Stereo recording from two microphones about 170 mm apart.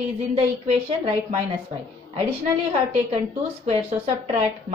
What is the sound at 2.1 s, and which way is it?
Speech, 35° right (ahead or behind).